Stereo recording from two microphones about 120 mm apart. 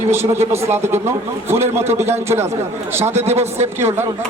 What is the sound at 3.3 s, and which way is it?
Speech, 65° right (ahead or behind).